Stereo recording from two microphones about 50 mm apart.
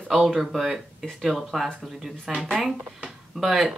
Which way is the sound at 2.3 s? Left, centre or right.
Right.